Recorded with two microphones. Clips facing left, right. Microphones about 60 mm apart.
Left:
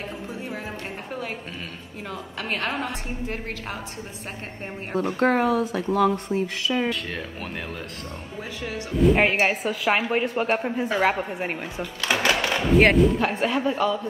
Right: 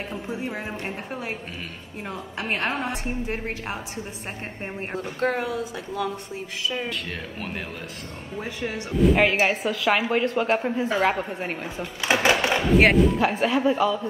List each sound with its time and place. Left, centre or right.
0.3 s a woman's voice: centre
5.2 s speech: left
6.9 s a woman's voice: centre
8.5 s a woman's voice: right
9.0 s a woman's voice: centre
12.0 s a sound: centre
12.7 s a woman's voice: centre